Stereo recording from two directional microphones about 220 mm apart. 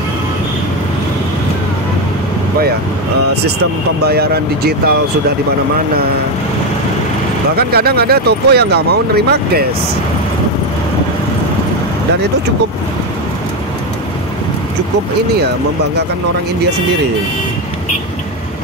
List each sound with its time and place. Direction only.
4.0 s speech: 45° right (ahead or behind)
7.5 s speech: 45° right (ahead or behind)